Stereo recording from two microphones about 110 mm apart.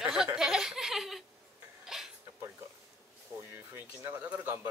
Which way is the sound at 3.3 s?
30° right (ahead or behind).